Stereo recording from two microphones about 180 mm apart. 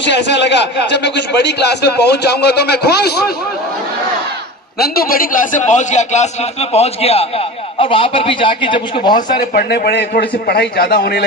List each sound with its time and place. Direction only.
0.0 s a man's voice: 75° left (ahead or behind)
4.8 s a man's voice: 55° left (ahead or behind); by 9.1 s 25° left (ahead or behind)
9.1 s a man's voice: 60° left (ahead or behind)